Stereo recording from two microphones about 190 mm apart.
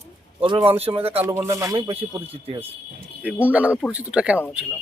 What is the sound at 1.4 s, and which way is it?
Speech, 15° right (ahead or behind).